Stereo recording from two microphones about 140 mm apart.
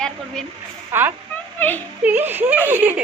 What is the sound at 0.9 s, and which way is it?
Speech, 15° right (ahead or behind).